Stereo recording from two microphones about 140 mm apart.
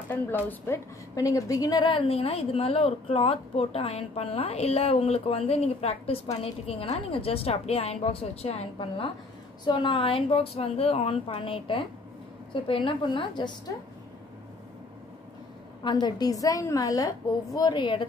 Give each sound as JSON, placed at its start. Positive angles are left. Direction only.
{"t": 0.1, "sound": "a woman's voice", "side_deg": 15}
{"t": 1.1, "sound": "a woman's voice", "side_deg": 25}
{"t": 1.9, "sound": "a woman's voice", "side_deg": 40}
{"t": 15.8, "sound": "a woman's voice", "side_deg": 30}